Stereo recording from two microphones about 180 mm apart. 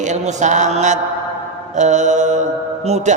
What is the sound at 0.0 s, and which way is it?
Speech, 40° right (ahead or behind).